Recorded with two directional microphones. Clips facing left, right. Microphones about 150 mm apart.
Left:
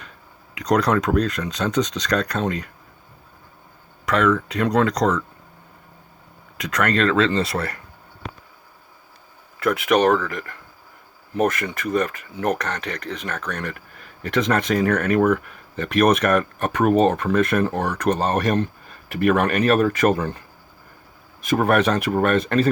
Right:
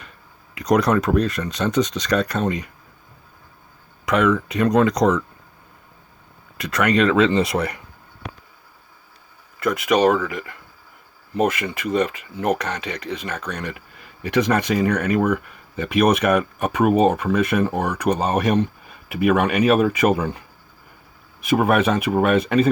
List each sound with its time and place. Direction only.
0.5 s speech: 10° right (ahead or behind)
4.1 s speech: 10° right (ahead or behind)
6.6 s speech: 5° right (ahead or behind)
9.6 s speech: 5° right (ahead or behind)
21.4 s speech: 5° right (ahead or behind)